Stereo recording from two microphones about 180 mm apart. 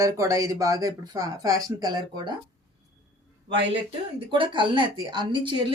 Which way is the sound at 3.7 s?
30° right (ahead or behind).